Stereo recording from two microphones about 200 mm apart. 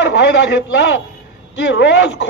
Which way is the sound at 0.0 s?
60° left (ahead or behind).